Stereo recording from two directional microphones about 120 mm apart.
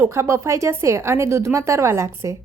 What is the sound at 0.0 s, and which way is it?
A woman's voice, 25° right (ahead or behind).